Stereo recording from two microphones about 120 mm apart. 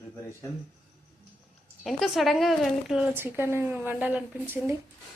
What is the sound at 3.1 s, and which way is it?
A woman's voice, 20° right (ahead or behind).